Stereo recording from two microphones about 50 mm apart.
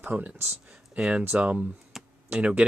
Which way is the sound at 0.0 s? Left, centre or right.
Right.